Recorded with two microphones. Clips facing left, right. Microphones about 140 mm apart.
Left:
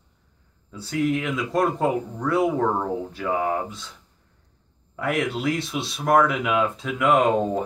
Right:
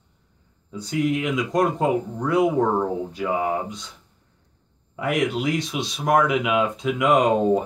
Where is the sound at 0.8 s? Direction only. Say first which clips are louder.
Right 1 dB; centre (ahead or behind).